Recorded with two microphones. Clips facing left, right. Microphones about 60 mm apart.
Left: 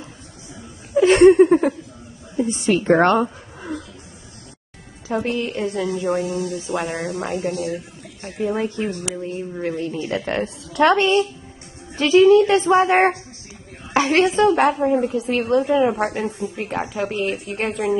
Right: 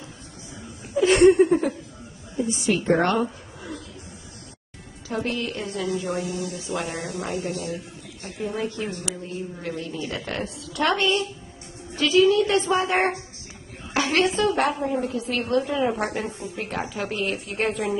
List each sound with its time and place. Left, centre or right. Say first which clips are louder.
0.9 s a woman's voice: left 5 dB; left
5.0 s a woman's voice: left 5 dB; left
13.9 s a sound: left 5 dB; left
14.3 s a woman's voice: left 6 dB; left
16.9 s speech: left 4 dB; centre